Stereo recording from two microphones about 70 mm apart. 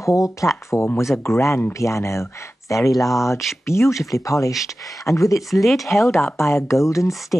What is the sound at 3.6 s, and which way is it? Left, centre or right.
Speech, left.